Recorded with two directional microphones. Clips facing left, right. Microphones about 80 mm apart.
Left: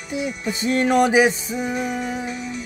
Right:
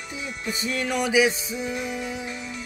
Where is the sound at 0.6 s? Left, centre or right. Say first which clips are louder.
Left 9 dB; left.